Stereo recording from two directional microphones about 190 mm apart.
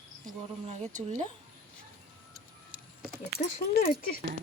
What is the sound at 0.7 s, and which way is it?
Speech, 40° right (ahead or behind).